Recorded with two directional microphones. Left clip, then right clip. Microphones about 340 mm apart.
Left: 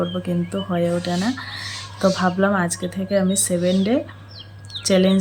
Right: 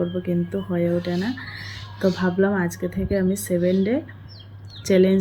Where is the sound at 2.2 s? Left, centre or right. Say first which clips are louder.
Left 2 dB; left.